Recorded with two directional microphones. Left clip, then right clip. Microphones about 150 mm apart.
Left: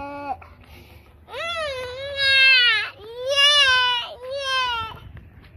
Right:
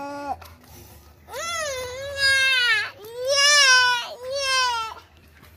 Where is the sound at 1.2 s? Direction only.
5° left (ahead or behind).